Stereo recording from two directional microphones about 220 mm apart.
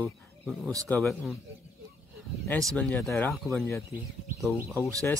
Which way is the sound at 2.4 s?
5° left (ahead or behind).